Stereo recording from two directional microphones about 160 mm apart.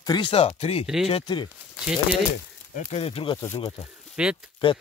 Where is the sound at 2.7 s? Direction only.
40° left (ahead or behind).